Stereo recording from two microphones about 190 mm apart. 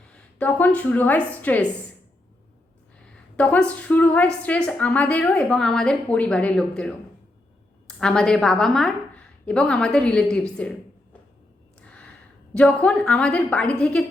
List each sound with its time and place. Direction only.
0.3 s a woman's voice: 10° left (ahead or behind)
3.3 s a woman's voice: 5° left (ahead or behind)
11.8 s gasp: 5° left (ahead or behind)
12.5 s a woman's voice: 5° left (ahead or behind)